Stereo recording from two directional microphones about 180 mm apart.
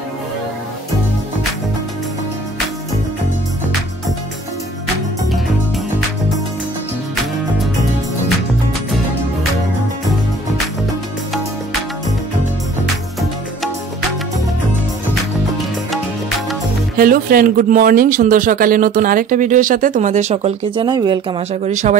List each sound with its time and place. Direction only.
16.9 s speech: 55° right (ahead or behind); by 21.4 s 25° right (ahead or behind)
21.4 s speech: 40° right (ahead or behind)